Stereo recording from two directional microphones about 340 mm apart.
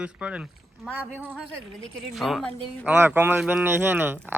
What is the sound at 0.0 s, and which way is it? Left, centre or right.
Speech, centre.